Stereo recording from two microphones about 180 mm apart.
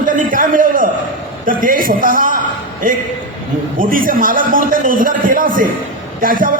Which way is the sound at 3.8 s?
50° right (ahead or behind).